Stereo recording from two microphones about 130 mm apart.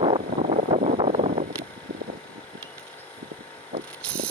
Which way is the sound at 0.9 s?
55° right (ahead or behind).